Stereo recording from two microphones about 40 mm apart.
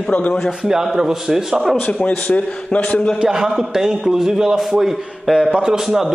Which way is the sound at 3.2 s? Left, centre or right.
Centre.